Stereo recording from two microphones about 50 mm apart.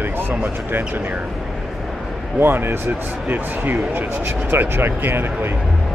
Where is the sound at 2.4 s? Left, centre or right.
Right.